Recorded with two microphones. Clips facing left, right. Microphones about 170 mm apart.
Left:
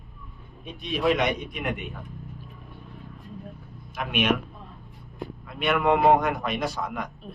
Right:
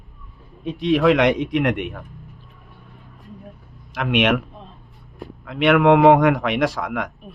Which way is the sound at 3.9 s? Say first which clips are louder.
Right 6 dB; 80° right.